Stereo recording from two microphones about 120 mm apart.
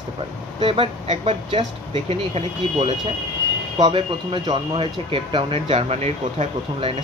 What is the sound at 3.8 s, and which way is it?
Speech, 45° right (ahead or behind).